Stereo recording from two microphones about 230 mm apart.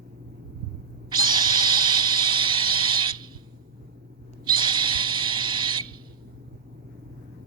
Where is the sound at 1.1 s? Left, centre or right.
Centre.